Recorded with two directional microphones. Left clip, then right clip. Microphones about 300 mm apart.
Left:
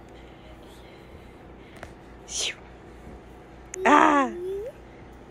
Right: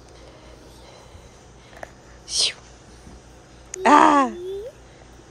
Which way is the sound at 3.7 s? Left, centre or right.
Centre.